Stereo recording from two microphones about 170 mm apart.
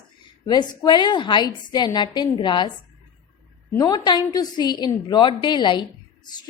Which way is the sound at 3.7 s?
25° left (ahead or behind).